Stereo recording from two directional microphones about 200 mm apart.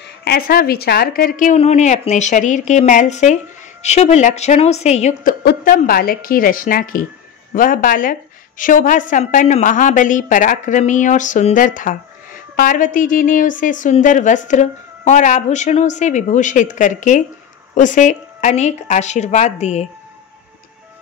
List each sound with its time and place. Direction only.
0.2 s a woman's voice: 50° left (ahead or behind); by 5.3 s 35° left (ahead or behind)
5.4 s a woman's voice: 50° left (ahead or behind)